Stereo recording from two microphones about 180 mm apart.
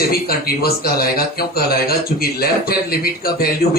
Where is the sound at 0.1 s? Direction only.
55° left (ahead or behind).